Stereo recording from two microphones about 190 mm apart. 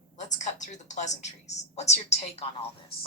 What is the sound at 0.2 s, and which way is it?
A woman's voice, 40° left (ahead or behind).